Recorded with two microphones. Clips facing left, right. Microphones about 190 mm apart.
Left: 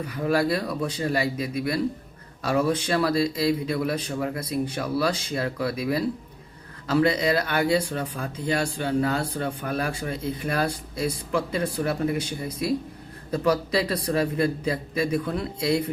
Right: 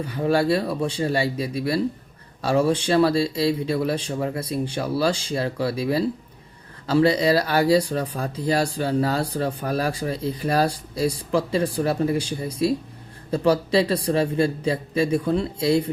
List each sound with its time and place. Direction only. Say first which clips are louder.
0.0 s speech: right 2 dB; 30° right (ahead or behind)